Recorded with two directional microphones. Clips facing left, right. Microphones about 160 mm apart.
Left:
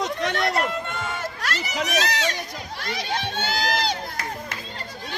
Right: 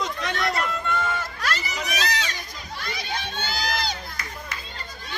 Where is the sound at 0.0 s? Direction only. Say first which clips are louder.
Left 3 dB; 65° left (ahead or behind).